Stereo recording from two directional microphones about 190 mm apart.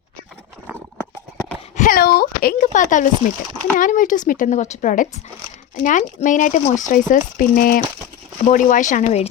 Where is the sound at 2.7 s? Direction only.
40° left (ahead or behind).